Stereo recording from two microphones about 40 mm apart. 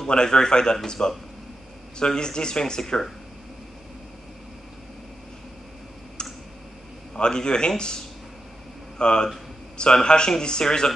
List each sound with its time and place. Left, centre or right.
0.0 s speech: centre
6.2 s tick: left
7.2 s speech: left